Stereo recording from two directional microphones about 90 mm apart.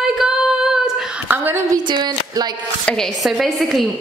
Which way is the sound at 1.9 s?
55° right (ahead or behind).